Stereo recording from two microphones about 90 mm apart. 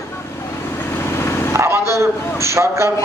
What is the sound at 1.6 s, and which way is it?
A man's voice, 30° right (ahead or behind).